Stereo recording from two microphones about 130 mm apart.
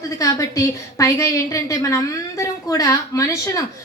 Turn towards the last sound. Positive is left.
turn(degrees=25)  # may be behind; listen again after turning